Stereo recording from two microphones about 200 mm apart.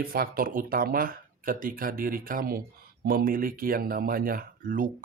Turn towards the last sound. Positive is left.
turn(degrees=-45)  # may be behind; listen again after turning